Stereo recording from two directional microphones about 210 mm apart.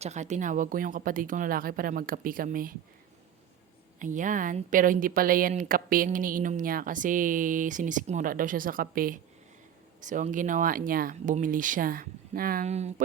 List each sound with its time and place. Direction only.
0.0 s a woman's voice: 35° right (ahead or behind)
4.0 s a woman's voice: 40° right (ahead or behind)